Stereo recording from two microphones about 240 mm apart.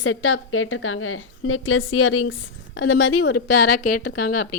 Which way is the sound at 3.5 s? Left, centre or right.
Left.